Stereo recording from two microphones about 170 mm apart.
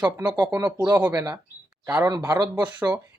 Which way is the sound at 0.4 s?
25° right (ahead or behind).